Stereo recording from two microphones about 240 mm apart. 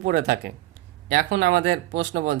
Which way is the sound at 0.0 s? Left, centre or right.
Right.